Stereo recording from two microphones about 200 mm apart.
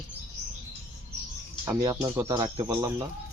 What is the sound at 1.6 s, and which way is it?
Speech, 20° right (ahead or behind).